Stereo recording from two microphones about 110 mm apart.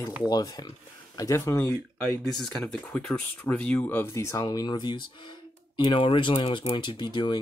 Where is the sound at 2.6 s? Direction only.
10° left (ahead or behind).